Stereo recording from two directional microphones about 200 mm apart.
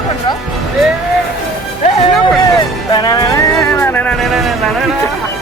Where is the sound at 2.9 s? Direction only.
20° left (ahead or behind); by 4.5 s centre (ahead or behind).